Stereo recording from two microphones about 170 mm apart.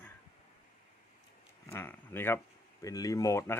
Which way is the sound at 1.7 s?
15° left (ahead or behind).